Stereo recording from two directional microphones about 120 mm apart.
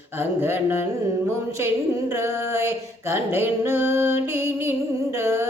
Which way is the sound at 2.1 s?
25° right (ahead or behind).